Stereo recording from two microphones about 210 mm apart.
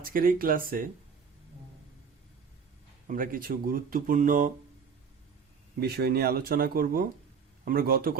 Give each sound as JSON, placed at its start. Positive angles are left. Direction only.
{"t": 0.0, "sound": "speech", "side_deg": -40}
{"t": 3.1, "sound": "speech", "side_deg": -40}
{"t": 5.8, "sound": "speech", "side_deg": -50}